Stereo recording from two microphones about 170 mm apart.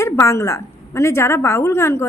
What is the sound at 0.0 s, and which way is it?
A woman's voice, 15° left (ahead or behind).